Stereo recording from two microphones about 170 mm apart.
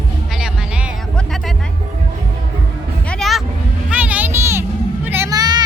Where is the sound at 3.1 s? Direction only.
Centre (ahead or behind).